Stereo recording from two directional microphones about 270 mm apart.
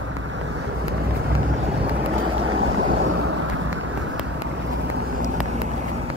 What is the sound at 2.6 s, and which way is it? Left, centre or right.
Boat, right.